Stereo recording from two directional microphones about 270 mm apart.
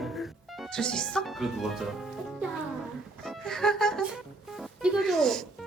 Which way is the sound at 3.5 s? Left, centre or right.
Centre.